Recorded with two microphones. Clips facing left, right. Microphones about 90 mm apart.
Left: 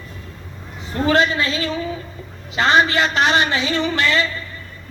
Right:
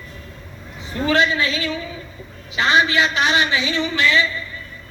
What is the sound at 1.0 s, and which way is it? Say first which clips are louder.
A man's voice: left 1 dB; 40° left (ahead or behind).